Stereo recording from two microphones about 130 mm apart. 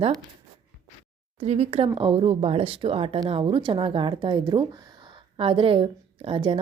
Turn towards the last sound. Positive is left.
turn(degrees=-45)  # may be behind; listen again after turning